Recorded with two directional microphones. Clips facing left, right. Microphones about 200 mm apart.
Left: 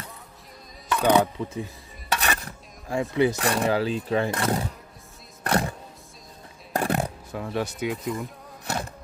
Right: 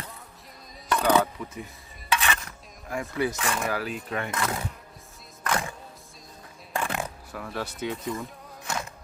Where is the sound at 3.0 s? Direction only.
20° left (ahead or behind).